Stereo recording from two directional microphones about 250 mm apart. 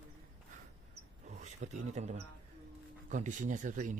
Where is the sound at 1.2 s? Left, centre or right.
Right.